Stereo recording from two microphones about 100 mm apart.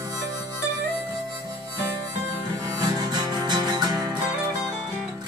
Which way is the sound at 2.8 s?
45° right (ahead or behind).